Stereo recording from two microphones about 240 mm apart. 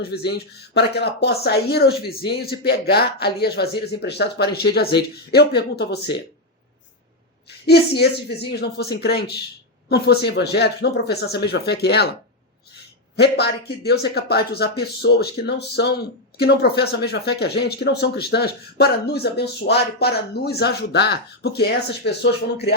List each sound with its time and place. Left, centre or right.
0.3 s speech: left
7.7 s speech: left
13.1 s speech: left